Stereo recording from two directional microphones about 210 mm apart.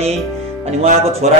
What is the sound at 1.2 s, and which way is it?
Speech, 35° right (ahead or behind).